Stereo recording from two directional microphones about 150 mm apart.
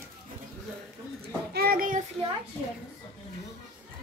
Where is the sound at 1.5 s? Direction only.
85° right; by 2.0 s 65° right (ahead or behind).